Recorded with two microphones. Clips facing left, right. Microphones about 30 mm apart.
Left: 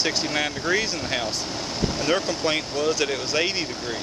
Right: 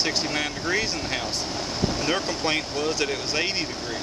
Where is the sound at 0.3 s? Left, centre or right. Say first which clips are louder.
Left 2 dB; centre.